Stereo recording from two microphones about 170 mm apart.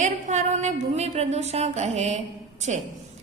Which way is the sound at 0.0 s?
45° right (ahead or behind).